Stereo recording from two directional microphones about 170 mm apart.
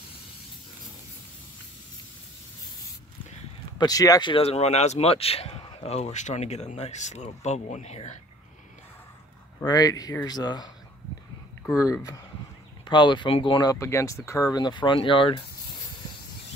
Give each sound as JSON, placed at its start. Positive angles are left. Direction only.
{"t": 3.7, "sound": "speech", "side_deg": 20}
{"t": 9.7, "sound": "speech", "side_deg": 20}